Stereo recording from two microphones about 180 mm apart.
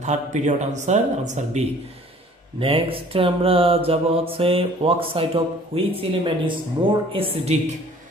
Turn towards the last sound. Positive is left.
turn(degrees=-35)  # may be behind; listen again after turning